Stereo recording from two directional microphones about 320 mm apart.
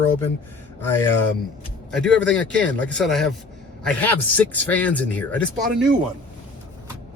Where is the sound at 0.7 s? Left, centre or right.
Centre.